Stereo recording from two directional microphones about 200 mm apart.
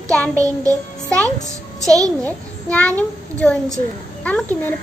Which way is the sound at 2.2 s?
5° left (ahead or behind).